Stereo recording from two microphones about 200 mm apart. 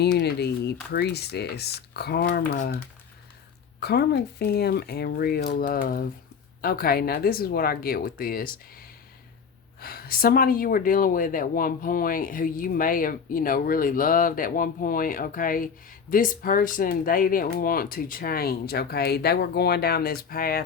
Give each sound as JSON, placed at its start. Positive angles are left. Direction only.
{"t": 0.0, "sound": "speech", "side_deg": 55}
{"t": 9.8, "sound": "speech", "side_deg": 50}